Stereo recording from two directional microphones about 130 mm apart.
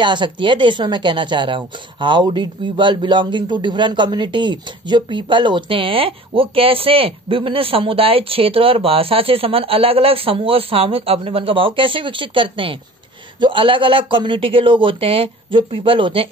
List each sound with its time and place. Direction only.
0.0 s speech: 40° right (ahead or behind)